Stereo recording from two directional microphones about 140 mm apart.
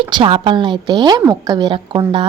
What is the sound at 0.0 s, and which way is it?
Speech, 35° right (ahead or behind).